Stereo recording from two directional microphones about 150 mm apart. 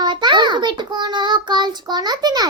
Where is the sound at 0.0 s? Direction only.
30° right (ahead or behind).